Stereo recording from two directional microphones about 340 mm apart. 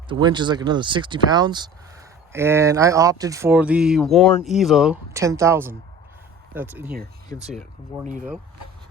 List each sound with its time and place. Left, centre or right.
0.1 s speech: centre
8.0 s speech: right